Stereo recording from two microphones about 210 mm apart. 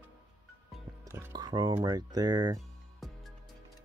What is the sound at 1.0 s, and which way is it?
Music, 15° right (ahead or behind).